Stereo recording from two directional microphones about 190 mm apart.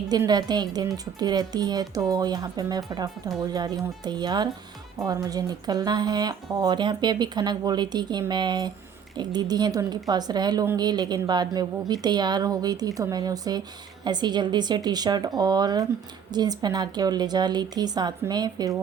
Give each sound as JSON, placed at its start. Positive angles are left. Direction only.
{"t": 0.1, "sound": "speech", "side_deg": -20}